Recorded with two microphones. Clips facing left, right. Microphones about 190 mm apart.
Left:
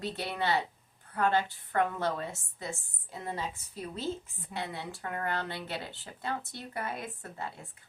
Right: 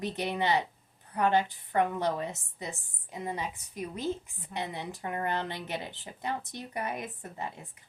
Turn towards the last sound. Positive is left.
turn(degrees=-15)  # may be behind; listen again after turning